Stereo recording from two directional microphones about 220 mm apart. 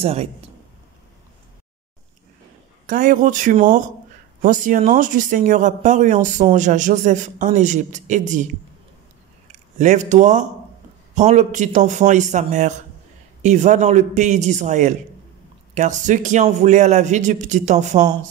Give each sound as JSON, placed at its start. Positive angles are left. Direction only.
{"t": 0.0, "sound": "a man's voice", "side_deg": -30}
{"t": 2.9, "sound": "speech", "side_deg": -35}
{"t": 9.5, "sound": "speech", "side_deg": -35}